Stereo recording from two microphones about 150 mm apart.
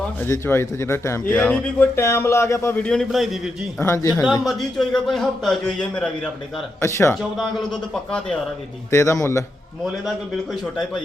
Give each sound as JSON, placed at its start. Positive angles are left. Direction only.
{"t": 0.2, "sound": "speech", "side_deg": 15}
{"t": 3.8, "sound": "a man's voice", "side_deg": 20}
{"t": 4.4, "sound": "speech", "side_deg": 0}
{"t": 6.8, "sound": "a man's voice", "side_deg": 20}
{"t": 7.1, "sound": "speech", "side_deg": 0}
{"t": 8.9, "sound": "a man's voice", "side_deg": 20}
{"t": 9.8, "sound": "speech", "side_deg": 0}